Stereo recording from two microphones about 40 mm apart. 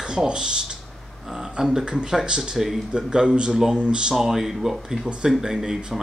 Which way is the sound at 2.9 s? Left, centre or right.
Right.